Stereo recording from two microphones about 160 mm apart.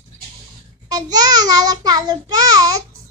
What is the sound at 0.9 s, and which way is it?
A child's voice, 25° right (ahead or behind).